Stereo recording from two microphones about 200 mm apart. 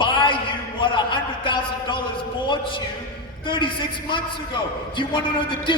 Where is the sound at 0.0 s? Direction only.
25° left (ahead or behind).